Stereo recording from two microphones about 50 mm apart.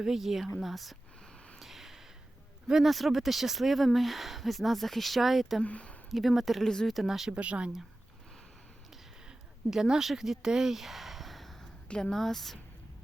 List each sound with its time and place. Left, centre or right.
0.0 s speech: centre
1.5 s snort: centre
2.6 s speech: centre
5.6 s speech: left
6.1 s speech: centre
7.3 s speech: right
8.9 s a sound: centre
12.1 s speech: centre